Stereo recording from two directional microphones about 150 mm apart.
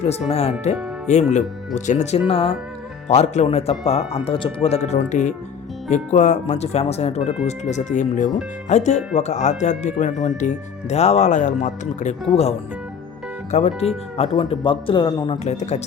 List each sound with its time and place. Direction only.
0.0 s speech: 45° left (ahead or behind)
13.5 s speech: 45° left (ahead or behind)
15.4 s speech: 50° left (ahead or behind)